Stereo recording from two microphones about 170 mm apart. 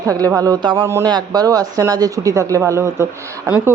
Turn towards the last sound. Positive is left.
turn(degrees=-10)  # may be behind; listen again after turning